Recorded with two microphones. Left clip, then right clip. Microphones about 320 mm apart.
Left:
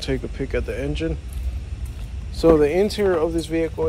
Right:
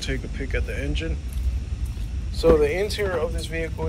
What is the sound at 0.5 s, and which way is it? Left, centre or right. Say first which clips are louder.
Speech: left 4 dB; centre.